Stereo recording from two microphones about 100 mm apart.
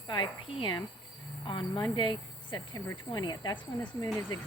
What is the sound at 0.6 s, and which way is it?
A woman's voice, 50° left (ahead or behind).